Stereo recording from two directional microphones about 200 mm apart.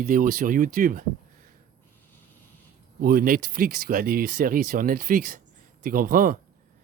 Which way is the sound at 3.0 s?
45° right (ahead or behind).